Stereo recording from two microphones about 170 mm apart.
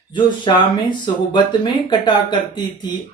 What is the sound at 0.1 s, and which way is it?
Speech, 25° left (ahead or behind).